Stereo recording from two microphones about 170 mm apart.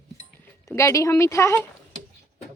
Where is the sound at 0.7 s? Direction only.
15° left (ahead or behind).